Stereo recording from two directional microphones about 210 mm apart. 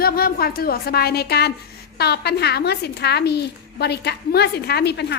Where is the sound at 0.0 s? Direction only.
45° left (ahead or behind).